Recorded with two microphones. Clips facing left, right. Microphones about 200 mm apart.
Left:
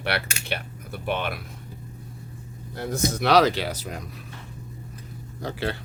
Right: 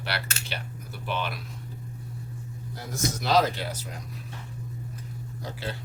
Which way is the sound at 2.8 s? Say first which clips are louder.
Left 6 dB; 60° left (ahead or behind).